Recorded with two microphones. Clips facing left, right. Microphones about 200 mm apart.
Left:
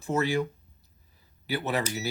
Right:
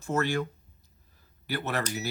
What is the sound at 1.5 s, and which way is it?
Speech, 15° left (ahead or behind).